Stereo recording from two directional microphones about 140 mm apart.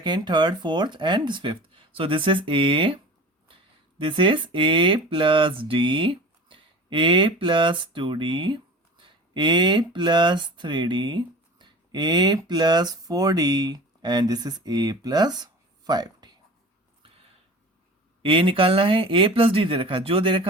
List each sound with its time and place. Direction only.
0.0 s speech: 30° right (ahead or behind)
18.2 s speech: 40° right (ahead or behind)